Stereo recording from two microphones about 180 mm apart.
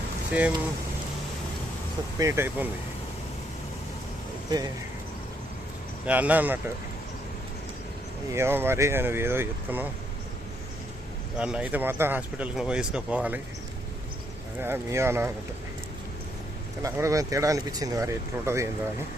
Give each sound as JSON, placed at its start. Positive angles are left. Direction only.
{"t": 2.1, "sound": "speech", "side_deg": -15}
{"t": 4.4, "sound": "speech", "side_deg": -20}
{"t": 6.1, "sound": "speech", "side_deg": -10}
{"t": 8.3, "sound": "speech", "side_deg": -15}
{"t": 11.3, "sound": "speech", "side_deg": -5}
{"t": 14.6, "sound": "speech", "side_deg": -15}
{"t": 16.8, "sound": "speech", "side_deg": -15}